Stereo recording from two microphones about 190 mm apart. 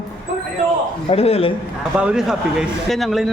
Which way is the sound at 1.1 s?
30° left (ahead or behind).